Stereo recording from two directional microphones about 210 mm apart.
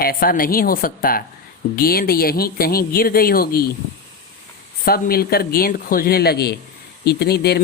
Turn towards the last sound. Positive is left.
turn(degrees=50)  # may be behind; listen again after turning